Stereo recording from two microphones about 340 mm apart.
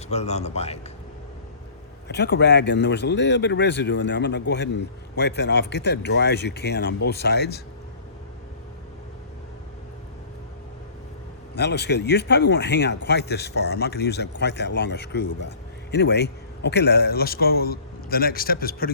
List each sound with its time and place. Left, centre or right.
0.1 s speech: centre
2.0 s speech: left
11.5 s speech: left